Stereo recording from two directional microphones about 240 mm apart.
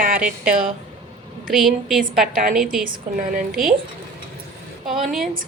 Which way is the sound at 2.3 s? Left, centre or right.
Right.